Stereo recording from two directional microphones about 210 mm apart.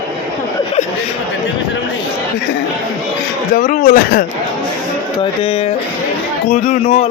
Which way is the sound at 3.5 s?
40° left (ahead or behind).